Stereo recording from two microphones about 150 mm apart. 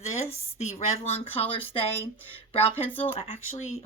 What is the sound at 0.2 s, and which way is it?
Speech, 45° left (ahead or behind).